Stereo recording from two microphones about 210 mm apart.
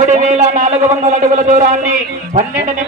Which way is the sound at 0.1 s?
35° right (ahead or behind).